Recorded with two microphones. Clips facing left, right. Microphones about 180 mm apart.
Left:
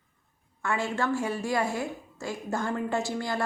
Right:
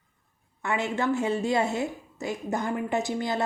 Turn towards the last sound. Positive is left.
turn(degrees=-20)  # may be behind; listen again after turning